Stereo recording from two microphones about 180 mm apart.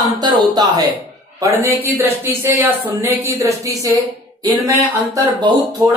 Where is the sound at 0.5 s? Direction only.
20° right (ahead or behind).